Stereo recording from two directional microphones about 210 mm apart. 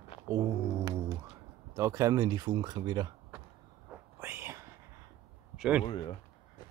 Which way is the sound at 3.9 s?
10° right (ahead or behind).